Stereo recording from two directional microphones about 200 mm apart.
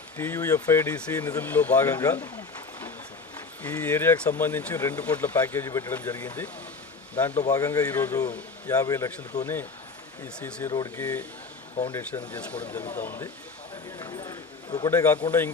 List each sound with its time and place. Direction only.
0.2 s speech: 15° left (ahead or behind)
3.6 s speech: 10° left (ahead or behind)
10.9 s speech: 10° left (ahead or behind)
14.0 s a sound: 20° left (ahead or behind)
15.3 s speech: 10° left (ahead or behind)